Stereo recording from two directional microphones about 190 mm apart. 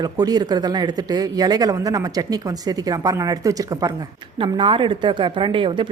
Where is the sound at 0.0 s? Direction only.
20° right (ahead or behind).